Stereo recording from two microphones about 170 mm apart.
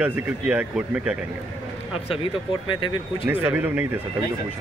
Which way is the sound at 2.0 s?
35° left (ahead or behind).